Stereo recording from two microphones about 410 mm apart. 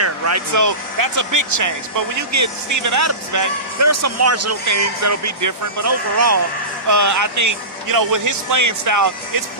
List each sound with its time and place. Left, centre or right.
0.0 s speech: right